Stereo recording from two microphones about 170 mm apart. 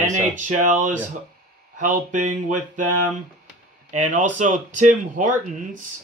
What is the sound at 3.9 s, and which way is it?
Speech, 45° right (ahead or behind).